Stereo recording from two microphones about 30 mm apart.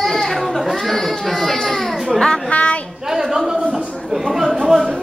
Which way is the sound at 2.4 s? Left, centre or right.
Left.